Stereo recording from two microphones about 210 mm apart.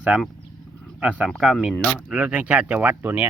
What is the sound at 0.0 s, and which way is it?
Speech, 5° right (ahead or behind).